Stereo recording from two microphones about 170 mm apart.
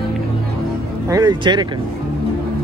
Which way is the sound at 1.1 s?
25° right (ahead or behind).